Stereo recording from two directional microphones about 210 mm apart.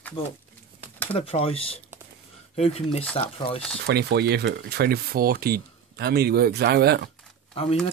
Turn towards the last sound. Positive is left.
turn(degrees=25)  # may be behind; listen again after turning